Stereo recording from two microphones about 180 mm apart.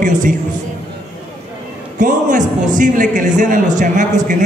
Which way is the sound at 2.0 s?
45° right (ahead or behind).